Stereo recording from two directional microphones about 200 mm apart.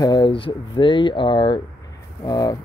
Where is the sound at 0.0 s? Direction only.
20° left (ahead or behind).